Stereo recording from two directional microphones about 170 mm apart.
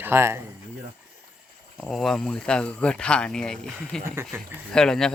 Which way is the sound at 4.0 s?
15° right (ahead or behind).